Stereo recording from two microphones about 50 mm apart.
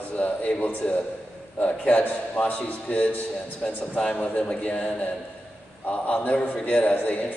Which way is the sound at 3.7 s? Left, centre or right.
Centre.